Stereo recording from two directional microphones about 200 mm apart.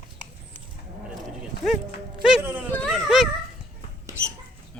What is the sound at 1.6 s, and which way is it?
A man's voice, centre (ahead or behind).